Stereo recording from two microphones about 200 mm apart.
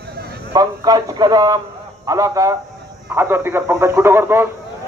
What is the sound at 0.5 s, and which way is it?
A man's voice, 20° right (ahead or behind).